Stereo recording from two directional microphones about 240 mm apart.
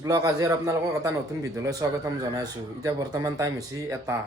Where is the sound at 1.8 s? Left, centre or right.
Centre.